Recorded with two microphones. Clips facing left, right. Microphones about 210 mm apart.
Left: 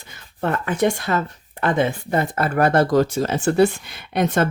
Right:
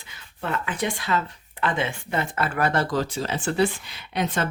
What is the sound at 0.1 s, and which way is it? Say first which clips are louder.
Speech: left 6 dB; 50° left (ahead or behind).